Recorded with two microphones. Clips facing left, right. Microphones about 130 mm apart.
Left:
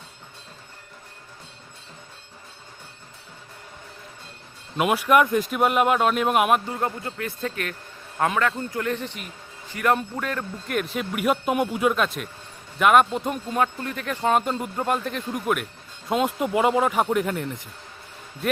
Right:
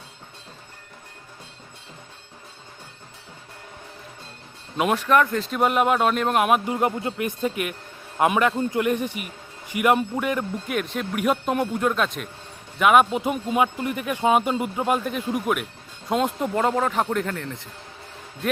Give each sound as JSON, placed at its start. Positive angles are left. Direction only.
{"t": 4.8, "sound": "speech", "side_deg": 5}
{"t": 5.5, "sound": "speech", "side_deg": 0}
{"t": 6.7, "sound": "speech", "side_deg": -20}
{"t": 10.8, "sound": "speech", "side_deg": 0}